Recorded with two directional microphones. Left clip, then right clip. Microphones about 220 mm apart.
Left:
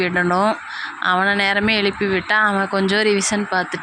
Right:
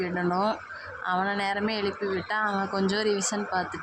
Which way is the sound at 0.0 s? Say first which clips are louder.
Left 9 dB; 25° left (ahead or behind).